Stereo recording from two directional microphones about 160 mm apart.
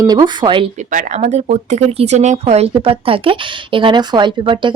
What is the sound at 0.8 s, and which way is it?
A woman's voice, 55° right (ahead or behind).